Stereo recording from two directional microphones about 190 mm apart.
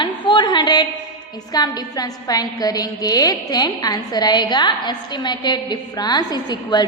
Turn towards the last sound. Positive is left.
turn(degrees=20)  # may be behind; listen again after turning